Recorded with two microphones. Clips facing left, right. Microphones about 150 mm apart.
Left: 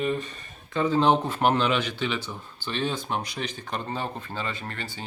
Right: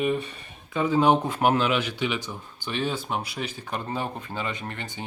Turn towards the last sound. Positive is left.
turn(degrees=-15)  # may be behind; listen again after turning